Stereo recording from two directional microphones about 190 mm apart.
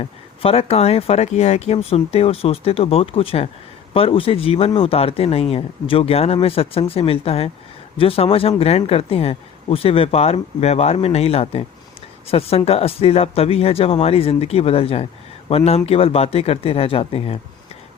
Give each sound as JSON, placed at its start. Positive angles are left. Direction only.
{"t": 0.0, "sound": "speech", "side_deg": 30}